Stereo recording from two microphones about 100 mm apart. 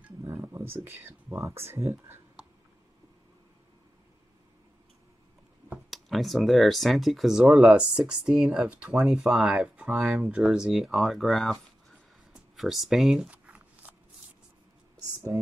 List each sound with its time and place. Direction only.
0.2 s speech: 25° right (ahead or behind)
2.4 s a sound: 5° right (ahead or behind)
5.9 s speech: centre (ahead or behind)
13.3 s shuffling cards: 15° right (ahead or behind)